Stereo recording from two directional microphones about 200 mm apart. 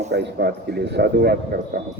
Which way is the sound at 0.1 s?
55° right (ahead or behind).